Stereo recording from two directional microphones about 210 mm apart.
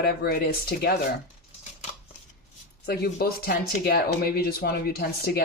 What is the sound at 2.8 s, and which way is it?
Speech, 50° left (ahead or behind).